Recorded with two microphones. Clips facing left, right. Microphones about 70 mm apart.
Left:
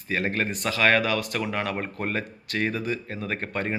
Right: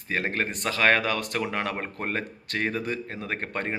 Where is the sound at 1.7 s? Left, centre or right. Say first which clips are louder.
Left 2 dB; right.